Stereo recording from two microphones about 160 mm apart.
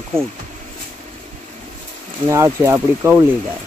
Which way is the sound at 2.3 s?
20° right (ahead or behind).